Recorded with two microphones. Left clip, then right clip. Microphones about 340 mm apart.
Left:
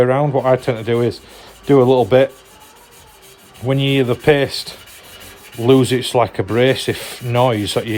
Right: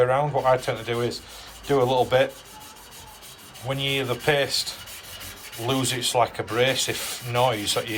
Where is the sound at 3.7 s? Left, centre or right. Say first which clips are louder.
Left 9 dB; left.